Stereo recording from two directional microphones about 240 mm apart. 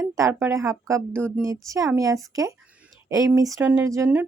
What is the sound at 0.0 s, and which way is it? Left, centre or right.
Speech, centre.